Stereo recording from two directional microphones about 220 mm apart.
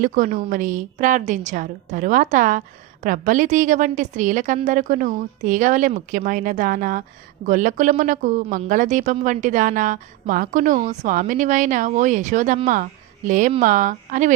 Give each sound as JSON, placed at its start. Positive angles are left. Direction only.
{"t": 0.0, "sound": "a woman's voice", "side_deg": -35}